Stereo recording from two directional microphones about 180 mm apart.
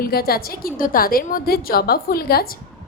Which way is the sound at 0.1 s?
55° left (ahead or behind).